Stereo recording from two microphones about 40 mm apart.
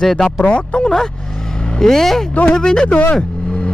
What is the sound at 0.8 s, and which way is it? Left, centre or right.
Speech, centre.